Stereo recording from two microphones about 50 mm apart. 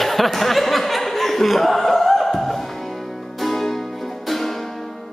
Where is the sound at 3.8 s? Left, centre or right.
Centre.